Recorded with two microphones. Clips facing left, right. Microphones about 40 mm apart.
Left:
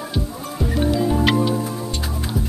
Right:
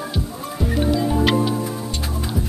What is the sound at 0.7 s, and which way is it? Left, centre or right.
Music, centre.